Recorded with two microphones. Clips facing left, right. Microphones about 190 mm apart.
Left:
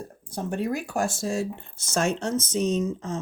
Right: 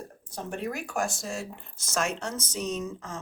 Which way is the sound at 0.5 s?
35° left (ahead or behind).